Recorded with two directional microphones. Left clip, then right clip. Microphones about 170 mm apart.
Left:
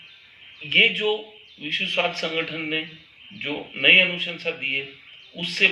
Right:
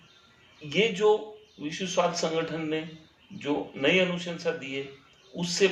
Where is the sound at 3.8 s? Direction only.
15° right (ahead or behind).